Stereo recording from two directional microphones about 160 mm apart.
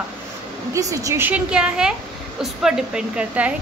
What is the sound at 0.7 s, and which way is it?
A woman's voice, 20° right (ahead or behind).